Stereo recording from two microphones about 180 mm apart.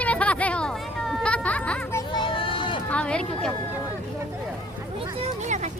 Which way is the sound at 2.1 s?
30° left (ahead or behind).